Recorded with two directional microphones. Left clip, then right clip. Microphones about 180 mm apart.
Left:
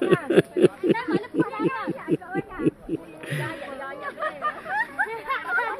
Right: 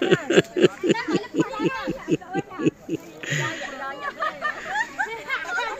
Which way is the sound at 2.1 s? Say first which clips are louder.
Right 1 dB; centre (ahead or behind).